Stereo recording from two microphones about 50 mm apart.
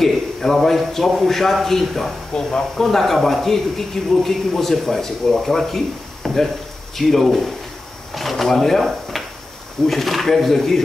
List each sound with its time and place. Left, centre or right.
0.0 s a man's voice: centre
9.8 s a man's voice: centre